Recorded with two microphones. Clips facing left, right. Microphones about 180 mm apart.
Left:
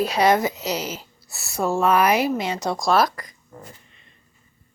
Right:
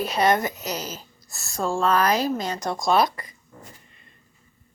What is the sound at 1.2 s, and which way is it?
Speech, 5° left (ahead or behind).